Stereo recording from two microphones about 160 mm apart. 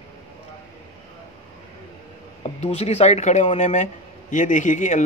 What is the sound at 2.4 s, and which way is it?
Speech, 40° left (ahead or behind).